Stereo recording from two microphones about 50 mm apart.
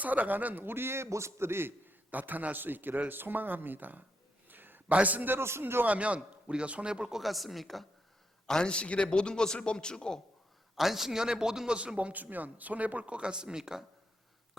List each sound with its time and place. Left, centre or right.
0.0 s a man's voice: right
2.0 s a man's voice: right
4.4 s a sound: right
4.9 s a man's voice: right
5.4 s speech: right
5.8 s speech: right
7.2 s speech: centre
8.4 s a man's voice: centre
10.8 s a man's voice: centre
11.9 s speech: right; by 13.8 s centre